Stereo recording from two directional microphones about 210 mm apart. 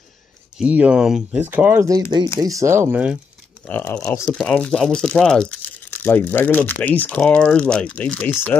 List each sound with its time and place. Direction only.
0.6 s speech: 5° right (ahead or behind)
3.6 s speech: 5° left (ahead or behind)